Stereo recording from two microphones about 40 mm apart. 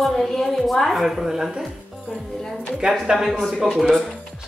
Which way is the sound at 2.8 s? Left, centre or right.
Right.